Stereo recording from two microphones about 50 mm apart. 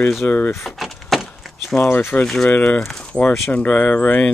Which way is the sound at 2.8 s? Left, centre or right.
Centre.